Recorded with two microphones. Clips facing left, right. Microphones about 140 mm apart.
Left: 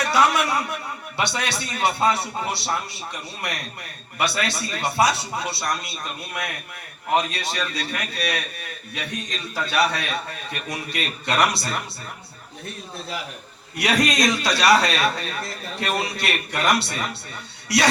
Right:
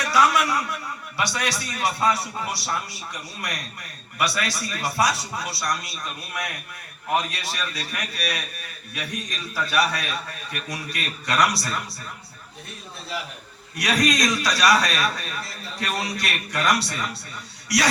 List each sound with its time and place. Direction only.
0.0 s a man's voice: 25° left (ahead or behind)
4.2 s a man's voice: 25° left (ahead or behind)
13.7 s a man's voice: 25° left (ahead or behind)